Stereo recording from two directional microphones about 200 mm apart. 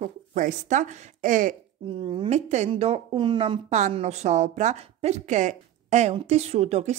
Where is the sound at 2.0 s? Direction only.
25° right (ahead or behind).